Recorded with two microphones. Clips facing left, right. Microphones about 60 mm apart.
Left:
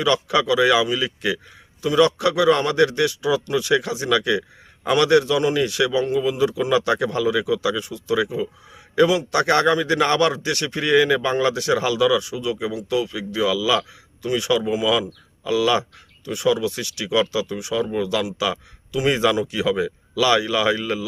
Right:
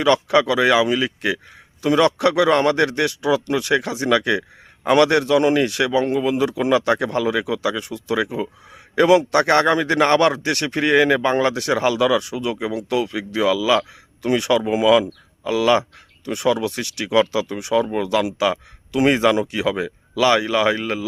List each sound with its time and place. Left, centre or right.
0.0 s a man's voice: right
10.8 s speech: right
12.7 s a man's voice: right
14.2 s a man's voice: right